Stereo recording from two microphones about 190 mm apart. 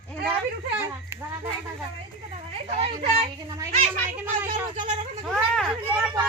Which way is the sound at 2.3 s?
35° right (ahead or behind).